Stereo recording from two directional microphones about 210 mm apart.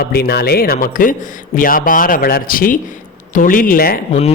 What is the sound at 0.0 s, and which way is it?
Speech, 50° left (ahead or behind).